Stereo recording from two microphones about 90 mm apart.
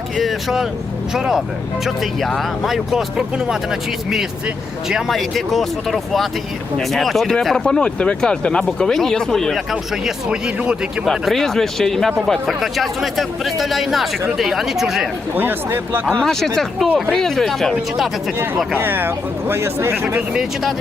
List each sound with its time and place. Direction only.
0.2 s speech: centre (ahead or behind)
10.2 s speech: 10° right (ahead or behind)
11.0 s speech: centre (ahead or behind)
15.4 s speech: 25° right (ahead or behind)
16.2 s speech: 5° left (ahead or behind)
18.8 s speech: 25° right (ahead or behind)
20.3 s speech: 5° right (ahead or behind)